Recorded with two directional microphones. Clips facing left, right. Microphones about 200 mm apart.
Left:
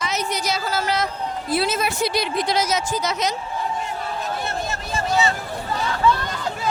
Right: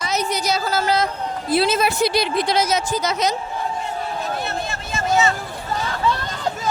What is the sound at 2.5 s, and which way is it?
Speech, 55° right (ahead or behind).